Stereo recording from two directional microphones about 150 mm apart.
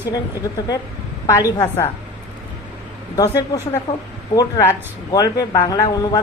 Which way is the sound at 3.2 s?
20° left (ahead or behind).